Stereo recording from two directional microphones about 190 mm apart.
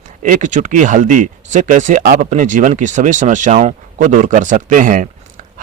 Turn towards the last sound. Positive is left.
turn(degrees=-45)  # may be behind; listen again after turning